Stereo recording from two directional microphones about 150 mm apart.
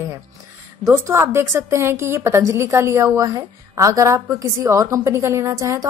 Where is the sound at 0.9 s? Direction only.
20° right (ahead or behind).